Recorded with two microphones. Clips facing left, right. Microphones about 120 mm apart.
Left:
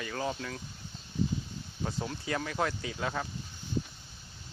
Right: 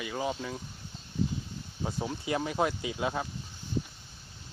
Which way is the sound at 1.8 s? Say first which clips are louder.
Right 2 dB; 15° right (ahead or behind).